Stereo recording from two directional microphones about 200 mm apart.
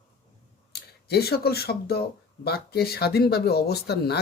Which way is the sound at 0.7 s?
50° left (ahead or behind).